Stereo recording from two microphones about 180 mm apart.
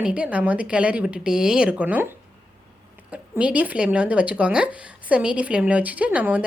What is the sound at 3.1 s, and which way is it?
Speech, 5° right (ahead or behind).